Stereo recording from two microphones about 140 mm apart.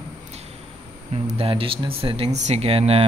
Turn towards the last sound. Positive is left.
turn(degrees=-45)  # may be behind; listen again after turning